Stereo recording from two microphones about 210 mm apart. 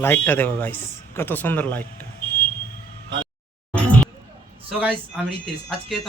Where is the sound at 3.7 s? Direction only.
5° left (ahead or behind).